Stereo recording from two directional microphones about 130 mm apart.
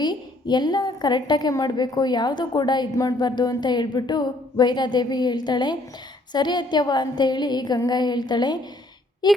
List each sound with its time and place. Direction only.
0.0 s a woman's voice: 35° left (ahead or behind)